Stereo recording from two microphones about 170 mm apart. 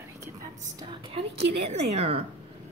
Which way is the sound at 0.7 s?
25° right (ahead or behind).